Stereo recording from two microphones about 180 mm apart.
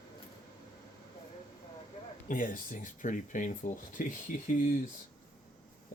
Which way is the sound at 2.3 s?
45° left (ahead or behind).